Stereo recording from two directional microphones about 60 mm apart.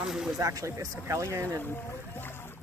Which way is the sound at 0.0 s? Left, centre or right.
Centre.